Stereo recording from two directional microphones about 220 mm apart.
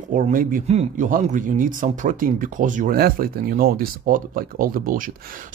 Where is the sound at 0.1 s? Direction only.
35° right (ahead or behind).